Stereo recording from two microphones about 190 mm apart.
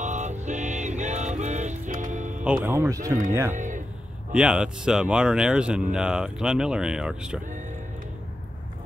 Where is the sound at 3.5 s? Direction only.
40° right (ahead or behind).